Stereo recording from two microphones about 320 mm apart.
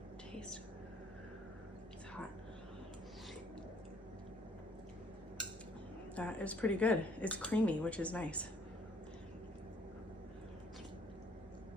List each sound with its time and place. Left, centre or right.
6.1 s speech: centre